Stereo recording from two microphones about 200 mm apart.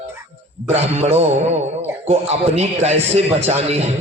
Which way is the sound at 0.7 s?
30° right (ahead or behind).